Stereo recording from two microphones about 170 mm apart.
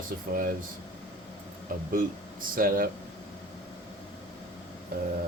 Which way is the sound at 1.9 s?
55° right (ahead or behind).